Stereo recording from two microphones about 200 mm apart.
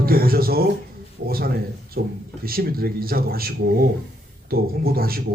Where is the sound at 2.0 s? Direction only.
50° right (ahead or behind).